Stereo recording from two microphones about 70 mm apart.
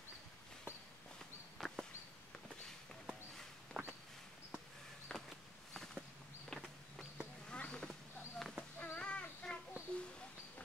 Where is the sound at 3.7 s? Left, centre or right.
Centre.